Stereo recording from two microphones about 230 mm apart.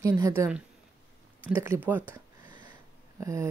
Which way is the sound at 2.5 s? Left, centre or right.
Centre.